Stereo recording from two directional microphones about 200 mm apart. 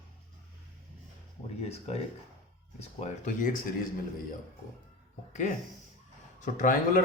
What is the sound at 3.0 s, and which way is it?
Speech, 40° left (ahead or behind).